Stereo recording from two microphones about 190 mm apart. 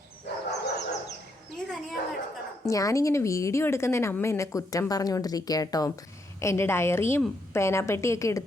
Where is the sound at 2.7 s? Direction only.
15° left (ahead or behind).